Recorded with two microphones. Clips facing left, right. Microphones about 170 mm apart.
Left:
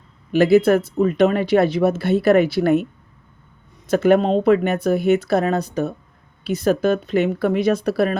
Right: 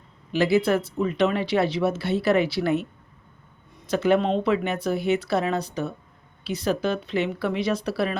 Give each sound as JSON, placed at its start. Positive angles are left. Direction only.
{"t": 0.3, "sound": "speech", "side_deg": 50}
{"t": 3.8, "sound": "speech", "side_deg": 50}